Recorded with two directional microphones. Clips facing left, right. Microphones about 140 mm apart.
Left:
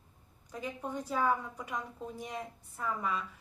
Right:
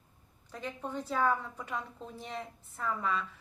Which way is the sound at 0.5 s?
10° left (ahead or behind).